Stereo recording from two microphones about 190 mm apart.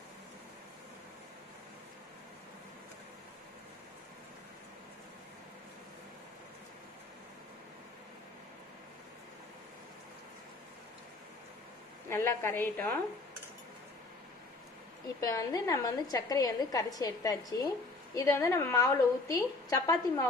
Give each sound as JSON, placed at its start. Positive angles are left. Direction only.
{"t": 12.1, "sound": "a woman's voice", "side_deg": 15}
{"t": 15.1, "sound": "a woman's voice", "side_deg": 20}